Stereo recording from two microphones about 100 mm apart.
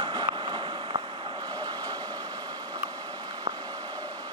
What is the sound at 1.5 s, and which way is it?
Vehicle, 40° right (ahead or behind).